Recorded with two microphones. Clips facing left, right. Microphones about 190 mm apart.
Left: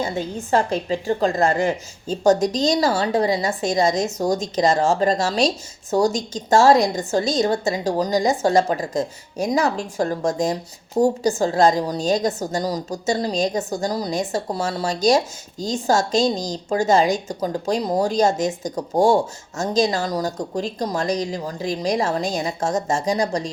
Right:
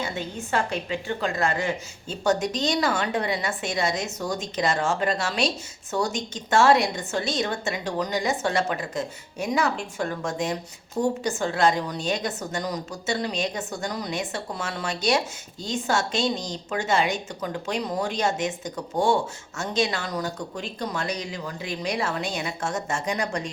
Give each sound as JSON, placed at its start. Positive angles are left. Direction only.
{"t": 0.0, "sound": "a woman's voice", "side_deg": 40}